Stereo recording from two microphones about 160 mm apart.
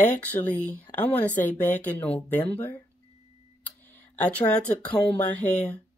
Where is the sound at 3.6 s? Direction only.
10° left (ahead or behind).